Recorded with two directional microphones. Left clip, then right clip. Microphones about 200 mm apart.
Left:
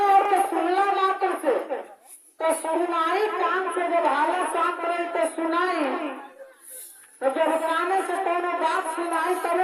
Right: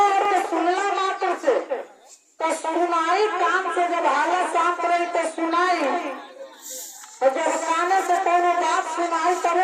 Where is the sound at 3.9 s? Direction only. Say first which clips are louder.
Left 1 dB; 40° right (ahead or behind).